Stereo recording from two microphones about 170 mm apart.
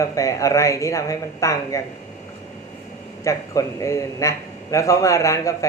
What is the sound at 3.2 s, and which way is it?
Speech, 20° left (ahead or behind).